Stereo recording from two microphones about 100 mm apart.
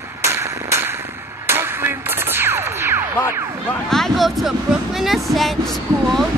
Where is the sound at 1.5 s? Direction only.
25° right (ahead or behind).